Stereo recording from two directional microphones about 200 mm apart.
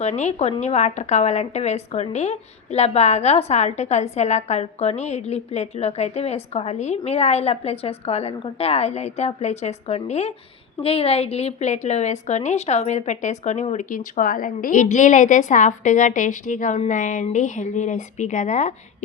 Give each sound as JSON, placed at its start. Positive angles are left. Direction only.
{"t": 0.0, "sound": "a woman's voice", "side_deg": 35}